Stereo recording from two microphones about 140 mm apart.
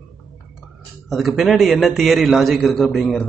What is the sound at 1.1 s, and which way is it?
A man's voice, centre (ahead or behind).